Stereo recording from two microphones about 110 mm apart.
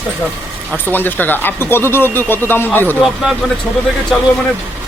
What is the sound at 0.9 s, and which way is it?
Speech, 15° left (ahead or behind).